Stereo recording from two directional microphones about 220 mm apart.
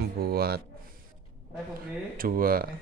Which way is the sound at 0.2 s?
45° right (ahead or behind).